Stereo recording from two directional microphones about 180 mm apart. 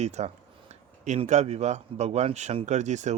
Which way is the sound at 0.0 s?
40° right (ahead or behind).